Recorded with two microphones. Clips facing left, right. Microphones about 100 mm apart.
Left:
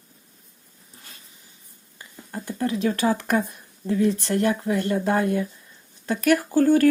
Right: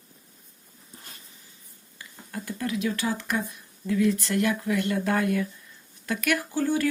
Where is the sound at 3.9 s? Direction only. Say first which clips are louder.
Left 2 dB; 35° left (ahead or behind).